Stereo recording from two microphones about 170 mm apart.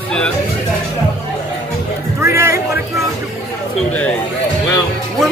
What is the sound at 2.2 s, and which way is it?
Speech, 15° right (ahead or behind).